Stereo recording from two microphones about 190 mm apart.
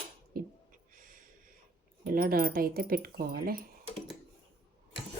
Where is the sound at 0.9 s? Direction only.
45° right (ahead or behind).